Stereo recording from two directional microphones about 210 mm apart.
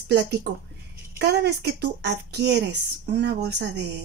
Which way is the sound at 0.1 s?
55° right (ahead or behind).